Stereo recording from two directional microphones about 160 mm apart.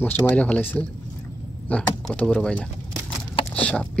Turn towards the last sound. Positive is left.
turn(degrees=5)  # may be behind; listen again after turning